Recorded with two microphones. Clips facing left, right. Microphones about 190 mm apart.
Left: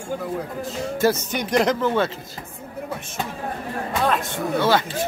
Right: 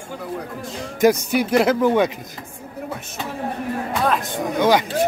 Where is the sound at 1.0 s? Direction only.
10° right (ahead or behind).